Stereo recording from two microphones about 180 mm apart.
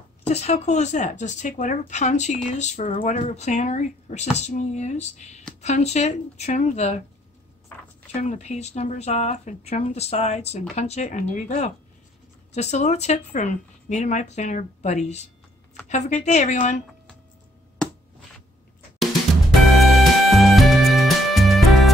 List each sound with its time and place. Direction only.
0.3 s speech: 35° left (ahead or behind)
8.1 s speech: 40° left (ahead or behind)
19.8 s music: centre (ahead or behind)